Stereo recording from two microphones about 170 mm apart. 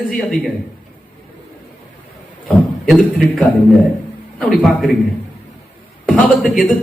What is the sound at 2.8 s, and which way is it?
Speech, centre (ahead or behind).